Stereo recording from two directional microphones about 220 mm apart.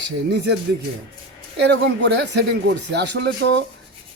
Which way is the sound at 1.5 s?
50° right (ahead or behind).